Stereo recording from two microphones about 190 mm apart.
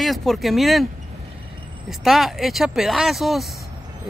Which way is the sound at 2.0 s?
Centre (ahead or behind).